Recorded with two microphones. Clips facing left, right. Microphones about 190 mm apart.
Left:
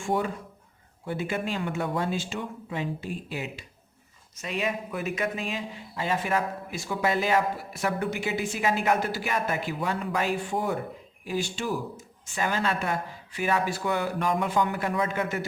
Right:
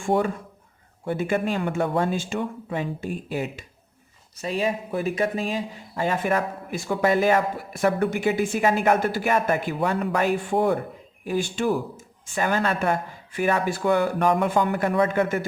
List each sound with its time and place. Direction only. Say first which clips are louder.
0.0 s speech: right 5 dB; 50° right (ahead or behind)
4.4 s speech: right 5 dB; 35° right (ahead or behind); by 15.4 s 55° right (ahead or behind)